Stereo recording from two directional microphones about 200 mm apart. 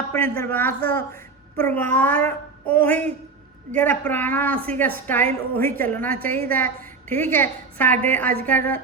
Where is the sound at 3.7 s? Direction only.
10° left (ahead or behind).